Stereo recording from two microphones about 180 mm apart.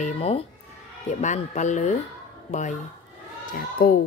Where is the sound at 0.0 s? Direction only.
35° left (ahead or behind).